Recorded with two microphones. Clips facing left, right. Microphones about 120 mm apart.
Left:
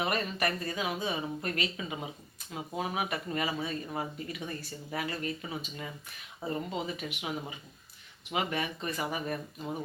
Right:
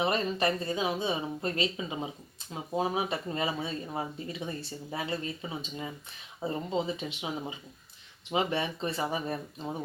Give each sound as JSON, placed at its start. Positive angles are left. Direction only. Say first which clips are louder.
{"t": 0.0, "sound": "speech", "louder": "right 3 dB", "side_deg": -25}